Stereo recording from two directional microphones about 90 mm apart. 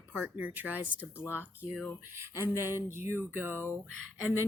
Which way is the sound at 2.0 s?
30° right (ahead or behind).